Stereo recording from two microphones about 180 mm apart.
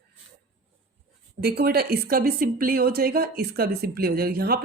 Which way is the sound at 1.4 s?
60° right (ahead or behind).